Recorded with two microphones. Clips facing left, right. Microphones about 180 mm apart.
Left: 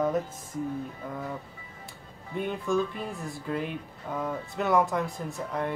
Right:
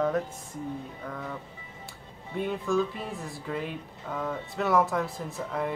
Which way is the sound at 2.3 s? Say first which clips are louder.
Even; centre (ahead or behind).